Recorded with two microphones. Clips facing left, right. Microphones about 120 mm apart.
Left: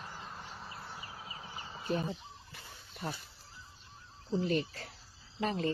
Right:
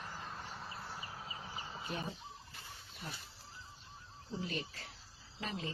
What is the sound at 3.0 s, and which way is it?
Speech, 90° left.